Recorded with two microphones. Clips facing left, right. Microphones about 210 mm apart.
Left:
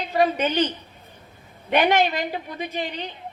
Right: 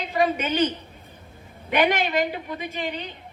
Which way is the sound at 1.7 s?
45° left (ahead or behind).